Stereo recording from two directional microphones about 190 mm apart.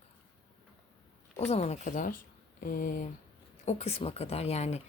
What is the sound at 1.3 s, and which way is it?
Speech, 35° left (ahead or behind).